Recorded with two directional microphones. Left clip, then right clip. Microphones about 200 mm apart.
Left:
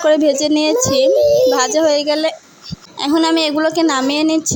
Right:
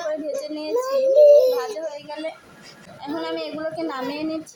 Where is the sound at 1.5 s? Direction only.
40° left (ahead or behind).